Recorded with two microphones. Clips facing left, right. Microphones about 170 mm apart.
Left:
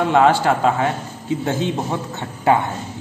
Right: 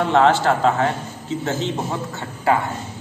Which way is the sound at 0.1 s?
10° left (ahead or behind).